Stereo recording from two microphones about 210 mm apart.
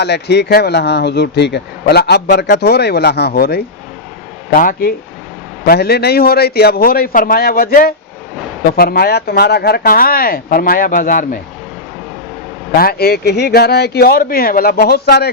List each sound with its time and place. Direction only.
0.0 s speech: 55° left (ahead or behind)
12.7 s speech: 45° left (ahead or behind)